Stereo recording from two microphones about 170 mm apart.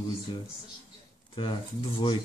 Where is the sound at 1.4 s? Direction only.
30° left (ahead or behind).